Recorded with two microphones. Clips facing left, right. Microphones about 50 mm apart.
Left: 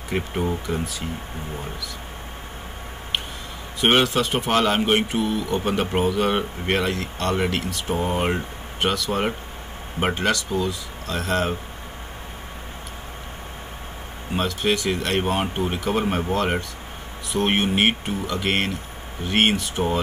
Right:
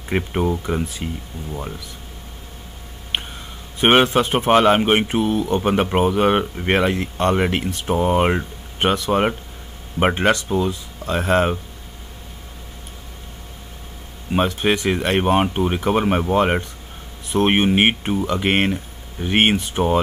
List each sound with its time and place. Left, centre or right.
0.1 s a man's voice: right
3.8 s a man's voice: right
14.3 s a man's voice: right